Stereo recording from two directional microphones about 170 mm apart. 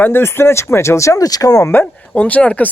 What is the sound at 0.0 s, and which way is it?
Speech, 15° left (ahead or behind).